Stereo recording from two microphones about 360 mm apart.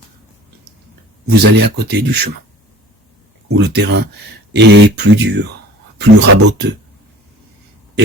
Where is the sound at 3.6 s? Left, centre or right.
Right.